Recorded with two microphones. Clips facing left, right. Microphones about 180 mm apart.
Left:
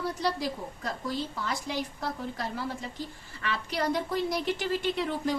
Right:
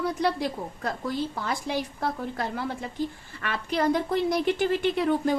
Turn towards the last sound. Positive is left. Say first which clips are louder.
# right 5 dB
turn(degrees=-55)  # may be behind; listen again after turning